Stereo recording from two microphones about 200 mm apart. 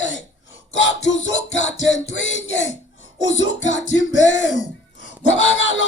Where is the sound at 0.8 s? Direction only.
70° left (ahead or behind).